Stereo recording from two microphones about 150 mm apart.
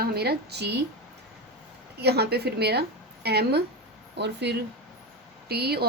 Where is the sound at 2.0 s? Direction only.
90° right.